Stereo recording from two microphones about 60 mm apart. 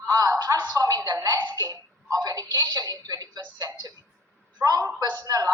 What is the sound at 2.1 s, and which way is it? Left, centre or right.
Music, right.